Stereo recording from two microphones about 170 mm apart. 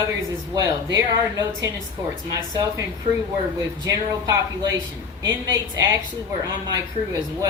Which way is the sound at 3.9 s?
20° right (ahead or behind).